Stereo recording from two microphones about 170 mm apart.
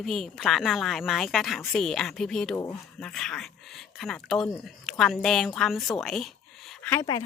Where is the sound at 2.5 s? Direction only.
15° left (ahead or behind).